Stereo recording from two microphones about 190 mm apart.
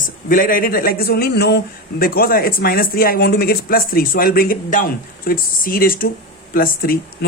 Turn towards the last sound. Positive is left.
turn(degrees=50)  # may be behind; listen again after turning